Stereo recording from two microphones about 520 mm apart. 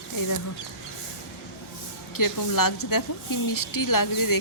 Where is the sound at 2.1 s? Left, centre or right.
Left.